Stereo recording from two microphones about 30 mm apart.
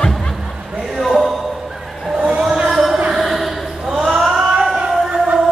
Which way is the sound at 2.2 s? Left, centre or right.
Right.